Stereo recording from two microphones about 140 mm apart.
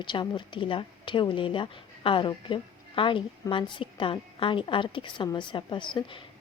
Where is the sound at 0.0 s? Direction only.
35° left (ahead or behind).